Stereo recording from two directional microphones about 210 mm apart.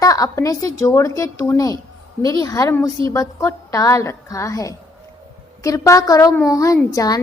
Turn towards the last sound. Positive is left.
turn(degrees=15)  # may be behind; listen again after turning